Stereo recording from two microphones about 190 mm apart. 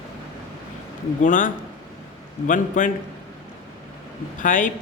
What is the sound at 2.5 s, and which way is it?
Speech, 40° left (ahead or behind).